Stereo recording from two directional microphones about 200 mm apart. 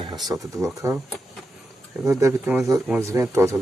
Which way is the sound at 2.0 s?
15° right (ahead or behind).